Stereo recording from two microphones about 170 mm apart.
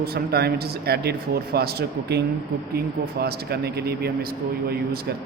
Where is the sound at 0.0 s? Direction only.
65° right (ahead or behind).